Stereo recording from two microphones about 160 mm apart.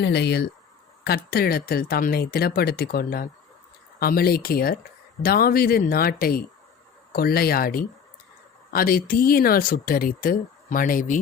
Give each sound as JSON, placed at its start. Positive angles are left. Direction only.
{"t": 0.0, "sound": "speech", "side_deg": 90}